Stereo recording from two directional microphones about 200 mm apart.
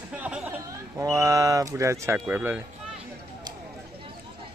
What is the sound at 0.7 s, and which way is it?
Speech, 15° right (ahead or behind).